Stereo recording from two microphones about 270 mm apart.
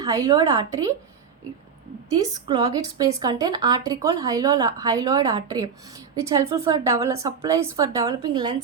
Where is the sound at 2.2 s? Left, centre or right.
Centre.